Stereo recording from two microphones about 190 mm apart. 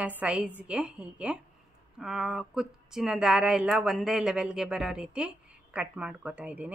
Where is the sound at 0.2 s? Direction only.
5° right (ahead or behind).